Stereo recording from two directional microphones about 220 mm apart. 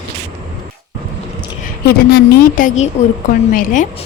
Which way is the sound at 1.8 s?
45° left (ahead or behind).